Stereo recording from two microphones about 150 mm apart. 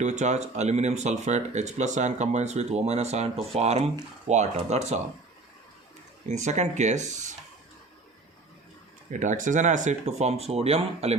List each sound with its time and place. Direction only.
0.0 s speech: 50° right (ahead or behind)
6.2 s speech: 50° right (ahead or behind)
9.0 s speech: 55° right (ahead or behind)